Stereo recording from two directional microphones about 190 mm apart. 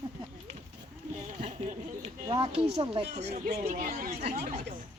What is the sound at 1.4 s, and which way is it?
Speech, 40° right (ahead or behind).